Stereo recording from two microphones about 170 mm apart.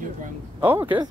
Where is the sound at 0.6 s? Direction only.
10° right (ahead or behind).